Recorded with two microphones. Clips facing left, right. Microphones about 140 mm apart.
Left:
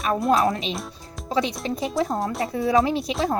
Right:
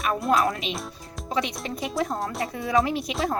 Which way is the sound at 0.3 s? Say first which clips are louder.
Left 2 dB; 25° left (ahead or behind).